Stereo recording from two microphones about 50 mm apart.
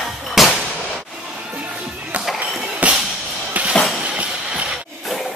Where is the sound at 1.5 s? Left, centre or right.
Right.